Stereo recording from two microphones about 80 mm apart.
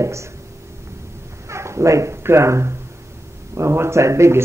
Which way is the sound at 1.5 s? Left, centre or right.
Right.